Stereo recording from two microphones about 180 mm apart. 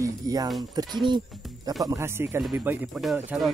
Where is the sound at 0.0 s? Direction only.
20° right (ahead or behind).